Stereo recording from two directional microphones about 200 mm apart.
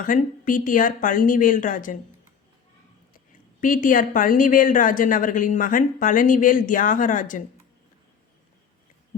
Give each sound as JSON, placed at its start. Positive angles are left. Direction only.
{"t": 0.0, "sound": "speech", "side_deg": 40}
{"t": 3.6, "sound": "a woman's voice", "side_deg": 40}